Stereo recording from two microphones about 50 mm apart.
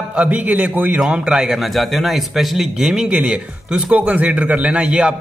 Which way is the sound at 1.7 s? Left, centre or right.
Centre.